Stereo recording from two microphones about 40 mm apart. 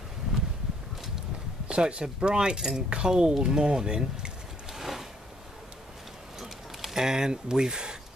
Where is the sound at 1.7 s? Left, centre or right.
Right.